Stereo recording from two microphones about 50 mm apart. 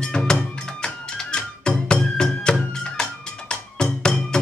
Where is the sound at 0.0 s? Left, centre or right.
Centre.